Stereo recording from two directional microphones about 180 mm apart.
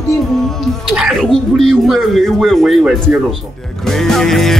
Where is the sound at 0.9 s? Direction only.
Centre (ahead or behind).